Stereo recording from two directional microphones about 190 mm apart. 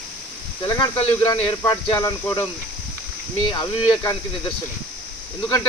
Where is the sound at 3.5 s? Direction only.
25° left (ahead or behind).